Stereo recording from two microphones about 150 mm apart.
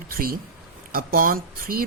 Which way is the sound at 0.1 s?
75° right (ahead or behind).